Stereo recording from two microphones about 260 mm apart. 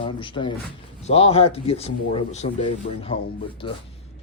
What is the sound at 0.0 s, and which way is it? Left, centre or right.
Speech, centre.